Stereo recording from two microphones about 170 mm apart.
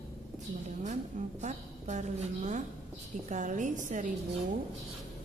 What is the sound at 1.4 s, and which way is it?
A woman's voice, 45° right (ahead or behind).